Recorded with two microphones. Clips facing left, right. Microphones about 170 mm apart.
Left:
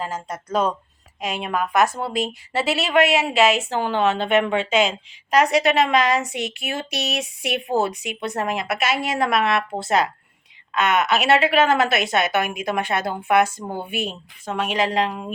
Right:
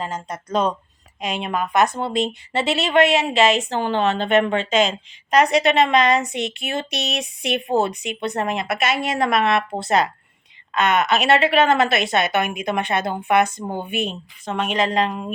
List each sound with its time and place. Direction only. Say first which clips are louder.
0.0 s a woman's voice: even; 5° left (ahead or behind)
13.6 s speech: right 2 dB; 20° right (ahead or behind)
13.8 s a woman's voice: right 2 dB; 5° left (ahead or behind)